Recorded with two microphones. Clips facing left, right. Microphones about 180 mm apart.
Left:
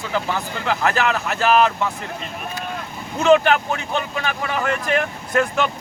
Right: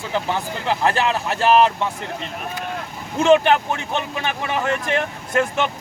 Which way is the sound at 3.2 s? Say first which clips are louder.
Even; 25° right (ahead or behind).